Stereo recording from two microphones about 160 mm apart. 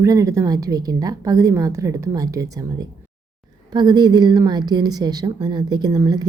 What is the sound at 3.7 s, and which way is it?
A woman's voice, 25° right (ahead or behind).